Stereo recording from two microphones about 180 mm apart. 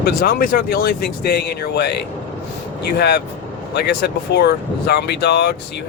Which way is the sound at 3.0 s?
65° left (ahead or behind).